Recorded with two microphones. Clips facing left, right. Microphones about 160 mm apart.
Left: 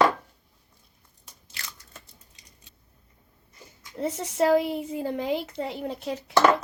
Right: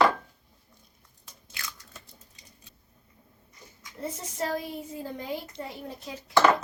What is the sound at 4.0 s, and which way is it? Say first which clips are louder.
A woman's voice: left 8 dB; 75° left (ahead or behind).